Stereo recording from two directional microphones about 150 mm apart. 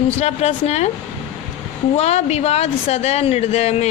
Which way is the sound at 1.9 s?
45° left (ahead or behind).